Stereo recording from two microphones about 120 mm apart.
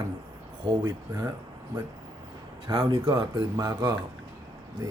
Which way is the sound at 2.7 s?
45° right (ahead or behind).